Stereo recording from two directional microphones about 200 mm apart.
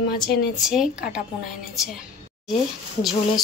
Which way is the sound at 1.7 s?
5° right (ahead or behind).